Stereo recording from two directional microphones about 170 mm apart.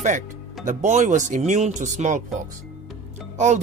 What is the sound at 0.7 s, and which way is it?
Speech, 45° right (ahead or behind).